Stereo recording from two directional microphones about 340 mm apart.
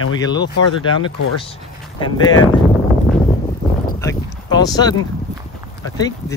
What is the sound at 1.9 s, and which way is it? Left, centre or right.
Speech, centre.